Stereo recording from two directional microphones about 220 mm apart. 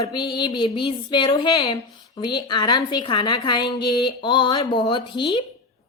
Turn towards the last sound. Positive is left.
turn(degrees=20)  # may be behind; listen again after turning